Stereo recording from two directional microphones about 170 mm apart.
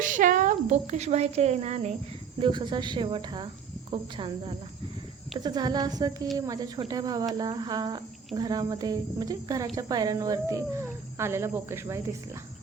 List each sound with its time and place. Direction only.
0.0 s speech: 50° right (ahead or behind)
2.4 s speech: 25° right (ahead or behind)